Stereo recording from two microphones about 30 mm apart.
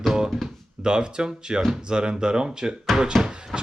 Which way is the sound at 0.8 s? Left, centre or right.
Right.